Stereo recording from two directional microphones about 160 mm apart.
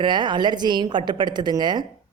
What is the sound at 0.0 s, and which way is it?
A woman's voice, 30° right (ahead or behind).